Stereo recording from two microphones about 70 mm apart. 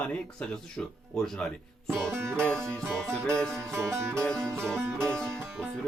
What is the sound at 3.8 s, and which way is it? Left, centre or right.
Music, right.